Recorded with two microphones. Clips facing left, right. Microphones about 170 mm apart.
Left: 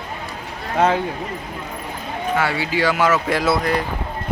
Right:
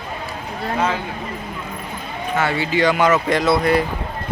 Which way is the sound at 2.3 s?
10° left (ahead or behind).